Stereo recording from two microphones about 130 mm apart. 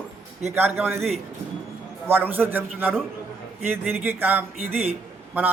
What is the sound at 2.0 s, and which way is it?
A man's voice, 15° right (ahead or behind).